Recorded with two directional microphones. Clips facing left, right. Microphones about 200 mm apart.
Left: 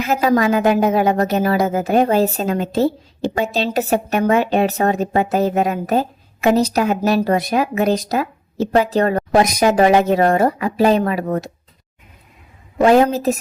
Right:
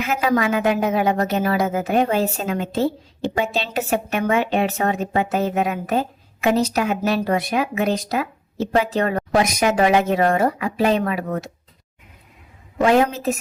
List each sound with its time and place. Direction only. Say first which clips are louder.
0.0 s a woman's voice: left 4 dB; 40° left (ahead or behind)
12.8 s a woman's voice: left 4 dB; 35° left (ahead or behind)